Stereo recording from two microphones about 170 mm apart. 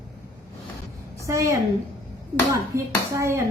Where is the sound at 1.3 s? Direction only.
15° right (ahead or behind).